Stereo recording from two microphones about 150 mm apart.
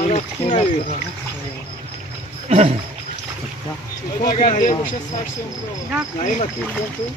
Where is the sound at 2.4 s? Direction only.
45° right (ahead or behind).